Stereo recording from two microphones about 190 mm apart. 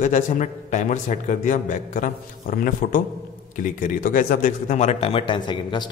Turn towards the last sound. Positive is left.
turn(degrees=25)  # may be behind; listen again after turning